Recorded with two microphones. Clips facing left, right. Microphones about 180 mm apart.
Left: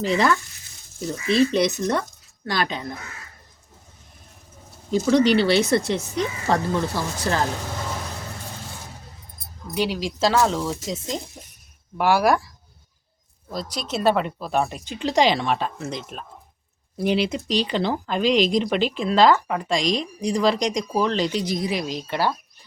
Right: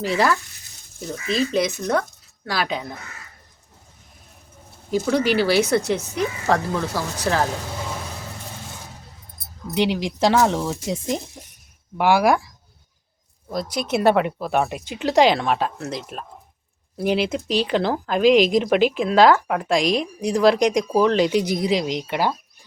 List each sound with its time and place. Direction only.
0.0 s speech: 5° right (ahead or behind)
1.4 s speech: centre (ahead or behind)
5.1 s speech: 5° right (ahead or behind)
9.4 s keys jangling: 70° right (ahead or behind)
9.7 s speech: 20° right (ahead or behind)
13.6 s speech: 55° right (ahead or behind)
13.9 s speech: 15° right (ahead or behind)
17.2 s speech: 5° right (ahead or behind)